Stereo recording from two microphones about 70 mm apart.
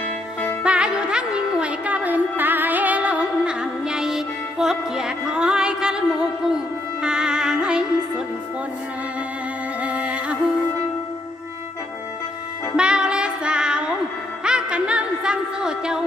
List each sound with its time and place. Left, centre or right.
0.6 s music: centre
9.8 s music: centre
12.7 s music: centre